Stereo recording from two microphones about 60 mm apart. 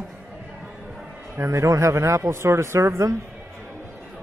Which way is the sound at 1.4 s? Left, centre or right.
Right.